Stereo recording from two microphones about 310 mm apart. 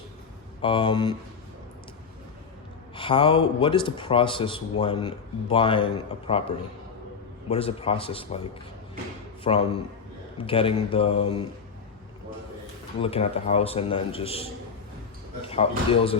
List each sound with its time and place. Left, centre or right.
0.6 s speech: centre
2.9 s speech: centre
7.4 s speech: centre
9.4 s a man's voice: centre
13.0 s a man's voice: centre